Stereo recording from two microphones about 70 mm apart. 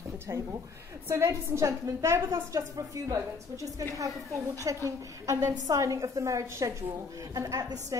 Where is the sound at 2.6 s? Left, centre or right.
Right.